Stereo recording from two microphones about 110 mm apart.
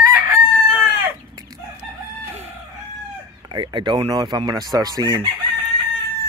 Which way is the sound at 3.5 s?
40° right (ahead or behind).